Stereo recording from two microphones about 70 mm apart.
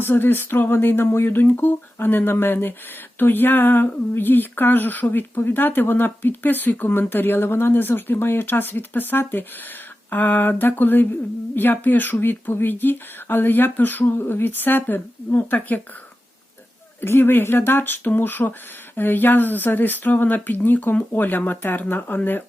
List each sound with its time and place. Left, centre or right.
0.0 s speech: left
17.0 s speech: left